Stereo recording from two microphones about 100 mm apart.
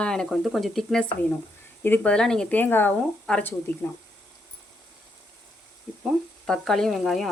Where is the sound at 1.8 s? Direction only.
15° left (ahead or behind).